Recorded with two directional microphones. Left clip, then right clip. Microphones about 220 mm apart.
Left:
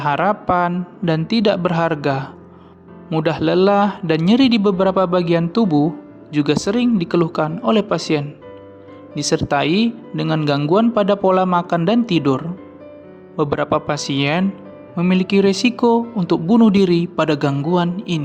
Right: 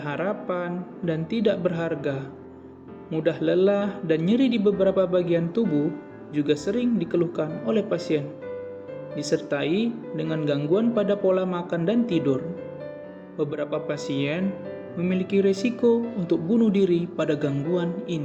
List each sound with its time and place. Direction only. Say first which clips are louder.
0.0 s speech: left 11 dB; 50° left (ahead or behind)